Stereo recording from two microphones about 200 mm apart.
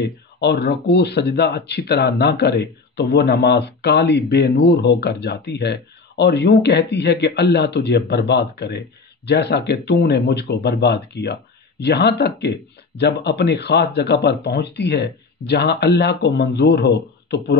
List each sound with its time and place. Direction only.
0.0 s speech: 55° left (ahead or behind)